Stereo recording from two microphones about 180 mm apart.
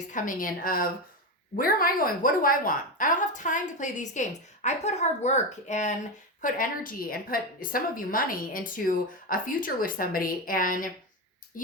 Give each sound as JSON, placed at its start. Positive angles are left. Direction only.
{"t": 0.1, "sound": "a woman's voice", "side_deg": 50}
{"t": 6.4, "sound": "a woman's voice", "side_deg": 50}